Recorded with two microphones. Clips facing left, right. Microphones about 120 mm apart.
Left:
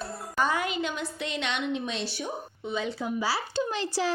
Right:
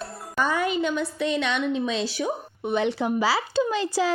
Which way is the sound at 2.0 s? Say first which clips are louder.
Right 6 dB; 90° right.